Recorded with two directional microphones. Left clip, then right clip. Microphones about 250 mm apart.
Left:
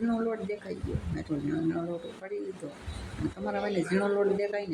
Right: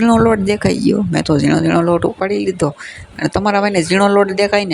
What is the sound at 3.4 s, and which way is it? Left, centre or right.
Speech, right.